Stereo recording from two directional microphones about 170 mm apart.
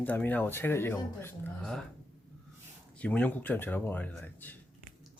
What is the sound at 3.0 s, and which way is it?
Speech, 10° left (ahead or behind).